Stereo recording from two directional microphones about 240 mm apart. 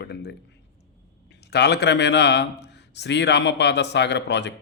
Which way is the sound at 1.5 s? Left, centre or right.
Left.